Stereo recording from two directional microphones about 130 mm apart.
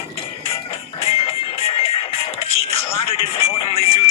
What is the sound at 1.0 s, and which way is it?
Music, 50° left (ahead or behind).